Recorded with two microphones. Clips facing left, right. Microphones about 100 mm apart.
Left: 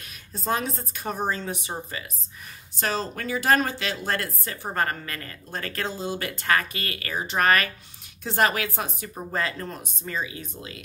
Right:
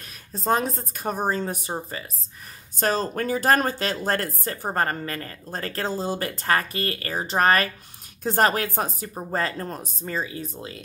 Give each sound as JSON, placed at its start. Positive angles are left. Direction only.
{"t": 0.3, "sound": "a woman's voice", "side_deg": -40}
{"t": 2.8, "sound": "a woman's voice", "side_deg": -45}